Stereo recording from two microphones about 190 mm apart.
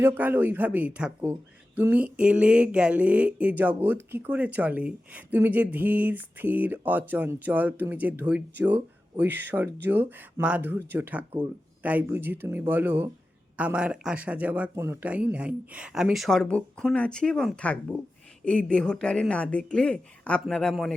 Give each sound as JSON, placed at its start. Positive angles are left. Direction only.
{"t": 0.0, "sound": "speech", "side_deg": -10}